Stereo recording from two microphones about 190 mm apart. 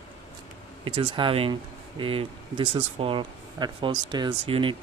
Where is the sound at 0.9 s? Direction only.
25° right (ahead or behind).